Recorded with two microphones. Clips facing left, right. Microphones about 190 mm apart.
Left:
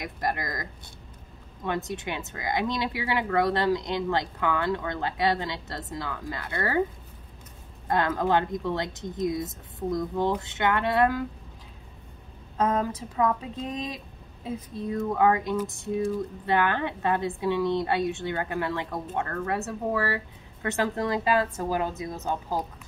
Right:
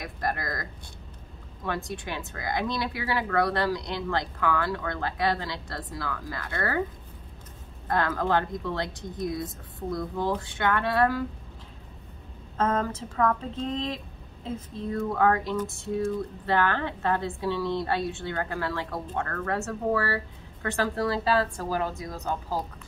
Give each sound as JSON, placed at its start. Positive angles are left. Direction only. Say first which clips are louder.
{"t": 0.0, "sound": "a woman's voice", "louder": "left 1 dB", "side_deg": 15}
{"t": 7.9, "sound": "a woman's voice", "louder": "left 1 dB", "side_deg": 20}
{"t": 12.5, "sound": "a woman's voice", "louder": "left 1 dB", "side_deg": 15}